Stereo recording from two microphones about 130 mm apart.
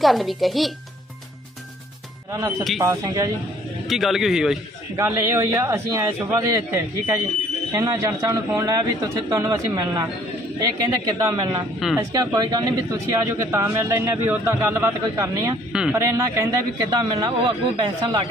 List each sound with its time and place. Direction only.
0.0 s a man's voice: centre (ahead or behind)
2.3 s speech: 25° right (ahead or behind)
3.8 s a man's voice: centre (ahead or behind)
5.0 s speech: 20° right (ahead or behind)
15.7 s speech: 5° right (ahead or behind)
16.0 s speech: 25° right (ahead or behind)